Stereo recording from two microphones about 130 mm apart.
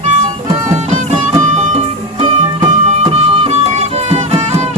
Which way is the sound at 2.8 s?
50° right (ahead or behind).